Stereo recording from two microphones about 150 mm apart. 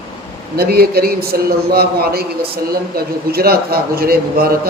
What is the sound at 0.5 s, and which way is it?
Speech, 90° right.